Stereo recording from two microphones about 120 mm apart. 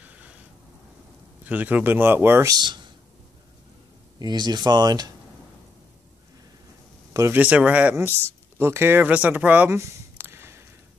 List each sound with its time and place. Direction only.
0.0 s a sound: 10° right (ahead or behind)
1.4 s speech: 15° right (ahead or behind)
2.5 s speech: 40° right (ahead or behind)
4.2 s speech: 35° right (ahead or behind)
7.3 s speech: 10° right (ahead or behind)
9.8 s a sound: 20° right (ahead or behind)